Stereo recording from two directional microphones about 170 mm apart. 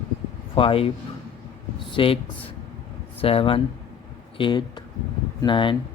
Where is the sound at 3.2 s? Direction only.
35° left (ahead or behind).